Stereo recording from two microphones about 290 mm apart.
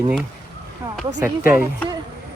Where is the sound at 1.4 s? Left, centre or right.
Centre.